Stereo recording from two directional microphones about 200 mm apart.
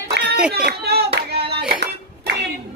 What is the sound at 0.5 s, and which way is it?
Hands, 50° right (ahead or behind).